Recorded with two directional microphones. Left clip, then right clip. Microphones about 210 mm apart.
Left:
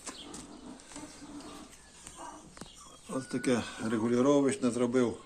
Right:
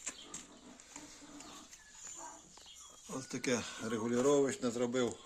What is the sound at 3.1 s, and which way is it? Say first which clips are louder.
Speech: left 5 dB; 55° right (ahead or behind).